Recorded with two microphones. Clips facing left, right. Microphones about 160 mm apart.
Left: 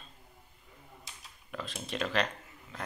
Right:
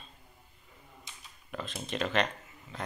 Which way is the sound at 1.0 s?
Centre (ahead or behind).